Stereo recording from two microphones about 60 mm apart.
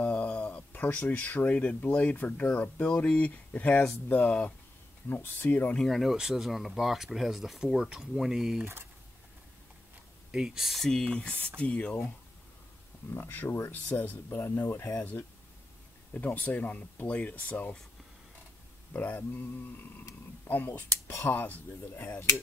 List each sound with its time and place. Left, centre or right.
0.0 s a sound: left
0.8 s speech: left
5.1 s speech: left
5.8 s speech: centre
10.3 s speech: centre; by 12.0 s left
13.1 s speech: left
16.1 s speech: left
18.9 s speech: left